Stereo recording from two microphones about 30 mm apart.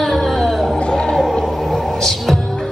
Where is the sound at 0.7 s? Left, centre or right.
Left.